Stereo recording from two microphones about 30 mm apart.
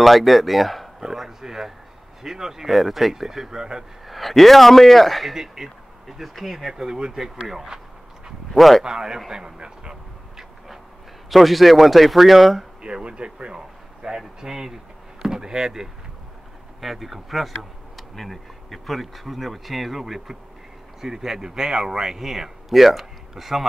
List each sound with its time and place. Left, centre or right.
0.0 s speech: centre
1.4 s speech: centre
2.7 s speech: centre
4.1 s speech: centre
5.3 s speech: centre
6.7 s speech: centre
8.5 s speech: centre
8.8 s speech: right
11.2 s speech: centre
12.8 s speech: right
13.6 s a sound: right
15.2 s speech: right
16.8 s speech: centre